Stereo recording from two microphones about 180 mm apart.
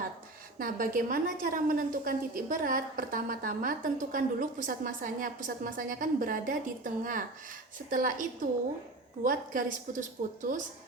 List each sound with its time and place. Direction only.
0.6 s a woman's voice: 50° right (ahead or behind)